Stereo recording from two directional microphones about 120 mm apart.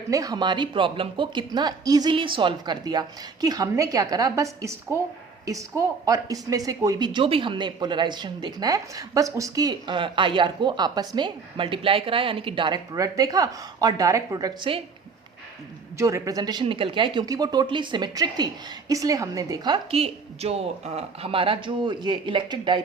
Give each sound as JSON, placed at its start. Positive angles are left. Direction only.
{"t": 0.1, "sound": "speech", "side_deg": -30}
{"t": 2.1, "sound": "speech", "side_deg": -45}
{"t": 16.0, "sound": "a woman's voice", "side_deg": -25}
{"t": 16.6, "sound": "speech", "side_deg": -45}
{"t": 17.2, "sound": "a woman's voice", "side_deg": -30}
{"t": 19.9, "sound": "speech", "side_deg": -55}